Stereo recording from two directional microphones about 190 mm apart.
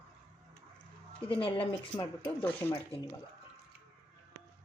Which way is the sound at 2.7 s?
25° left (ahead or behind).